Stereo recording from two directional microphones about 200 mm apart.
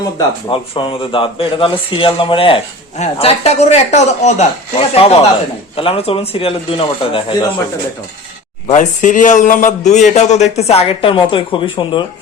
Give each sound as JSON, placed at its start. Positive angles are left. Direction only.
{"t": 0.2, "sound": "a man's voice", "side_deg": 25}
{"t": 8.6, "sound": "a man's voice", "side_deg": 35}